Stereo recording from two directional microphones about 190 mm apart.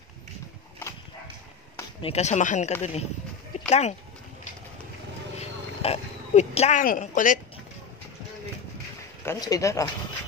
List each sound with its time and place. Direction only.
2.0 s speech: 30° left (ahead or behind)
5.4 s speech: 35° left (ahead or behind)
9.2 s speech: 15° left (ahead or behind)